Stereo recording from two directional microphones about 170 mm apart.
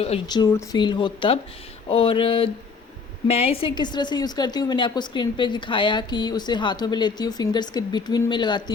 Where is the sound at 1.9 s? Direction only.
30° left (ahead or behind).